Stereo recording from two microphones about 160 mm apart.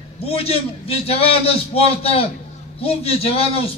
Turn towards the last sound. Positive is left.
turn(degrees=35)  # may be behind; listen again after turning